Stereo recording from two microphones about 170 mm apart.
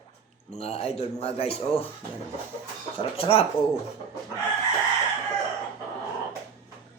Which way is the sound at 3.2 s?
35° left (ahead or behind).